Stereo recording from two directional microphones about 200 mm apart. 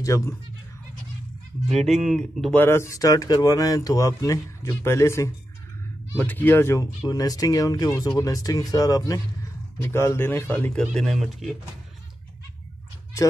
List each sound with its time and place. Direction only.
0.0 s speech: 15° left (ahead or behind)
2.0 s speech: centre (ahead or behind)
2.6 s speech: 15° left (ahead or behind)